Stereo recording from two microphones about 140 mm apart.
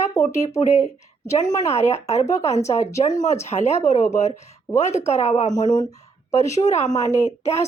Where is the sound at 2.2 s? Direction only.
20° left (ahead or behind).